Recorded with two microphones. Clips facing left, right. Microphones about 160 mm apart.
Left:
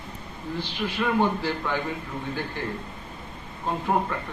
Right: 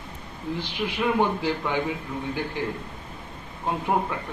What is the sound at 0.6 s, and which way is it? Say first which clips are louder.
Speech: even; 15° right (ahead or behind).